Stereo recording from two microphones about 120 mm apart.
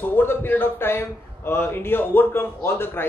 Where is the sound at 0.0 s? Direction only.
15° left (ahead or behind).